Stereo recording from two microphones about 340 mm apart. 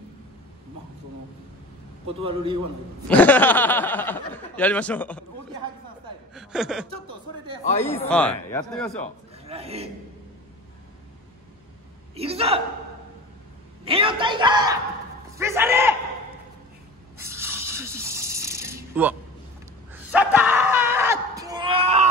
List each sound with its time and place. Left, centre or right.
2.2 s a man's voice: centre
3.1 s speech: centre
6.3 s speech: centre
9.5 s a man's voice: centre
12.2 s a man's voice: centre
13.8 s a man's voice: centre
17.2 s a sound: centre
19.9 s screaming: centre